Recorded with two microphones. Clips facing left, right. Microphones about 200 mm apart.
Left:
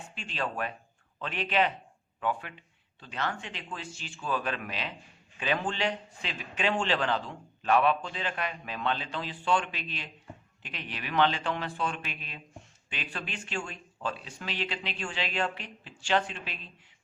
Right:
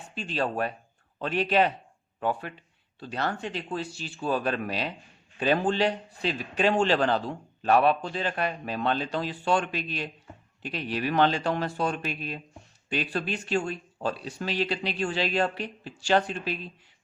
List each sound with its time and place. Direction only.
0.1 s a man's voice: 35° right (ahead or behind)